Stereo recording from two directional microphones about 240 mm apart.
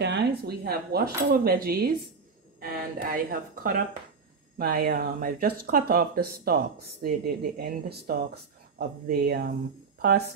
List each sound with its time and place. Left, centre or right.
0.0 s speech: right